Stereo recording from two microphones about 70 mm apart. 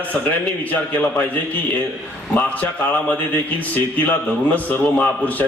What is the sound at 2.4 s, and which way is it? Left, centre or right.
Speech, left.